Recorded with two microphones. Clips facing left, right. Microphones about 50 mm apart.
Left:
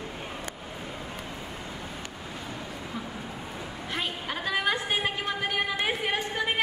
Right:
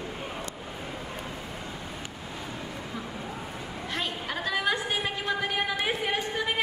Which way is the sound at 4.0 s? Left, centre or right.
Centre.